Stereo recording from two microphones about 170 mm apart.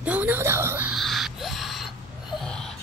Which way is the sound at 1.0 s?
Centre (ahead or behind).